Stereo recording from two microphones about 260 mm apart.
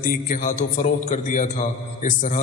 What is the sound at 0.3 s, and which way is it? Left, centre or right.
A man's voice, left.